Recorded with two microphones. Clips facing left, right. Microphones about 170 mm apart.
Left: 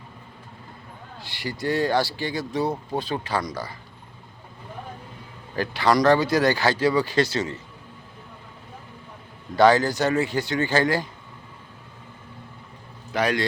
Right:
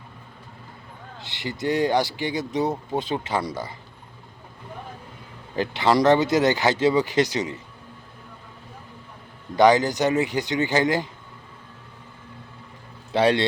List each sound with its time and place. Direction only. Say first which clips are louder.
1.2 s speech: right 1 dB; 20° right (ahead or behind)
5.5 s speech: right 1 dB; 20° right (ahead or behind)
9.6 s speech: even; 20° right (ahead or behind)
13.1 s speech: right 4 dB; 30° right (ahead or behind)